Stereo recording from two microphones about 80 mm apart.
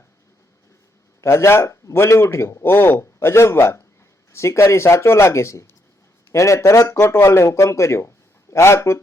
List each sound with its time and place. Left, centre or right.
1.2 s a man's voice: left